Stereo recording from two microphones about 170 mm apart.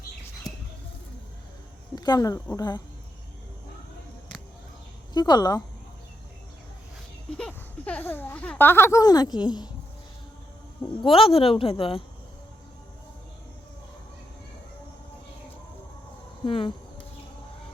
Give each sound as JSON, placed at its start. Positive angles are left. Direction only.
{"t": 2.0, "sound": "speech", "side_deg": 25}
{"t": 5.1, "sound": "speech", "side_deg": 25}
{"t": 7.3, "sound": "speech", "side_deg": 5}
{"t": 11.0, "sound": "a woman's voice", "side_deg": 35}
{"t": 16.4, "sound": "insect", "side_deg": 30}